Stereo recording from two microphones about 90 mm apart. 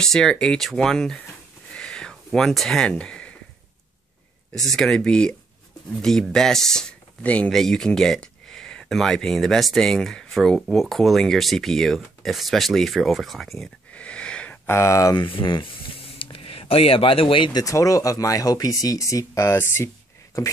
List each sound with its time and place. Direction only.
0.0 s speech: 5° left (ahead or behind)
1.7 s a sound: 10° left (ahead or behind)
4.6 s speech: 5° left (ahead or behind)
13.9 s wheeze: 15° left (ahead or behind)
14.7 s speech: 30° left (ahead or behind)
15.1 s speech: 70° left (ahead or behind)
17.6 s speech: 40° left (ahead or behind)